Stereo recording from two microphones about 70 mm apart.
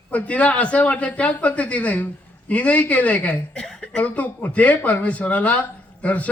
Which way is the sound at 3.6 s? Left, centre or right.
Centre.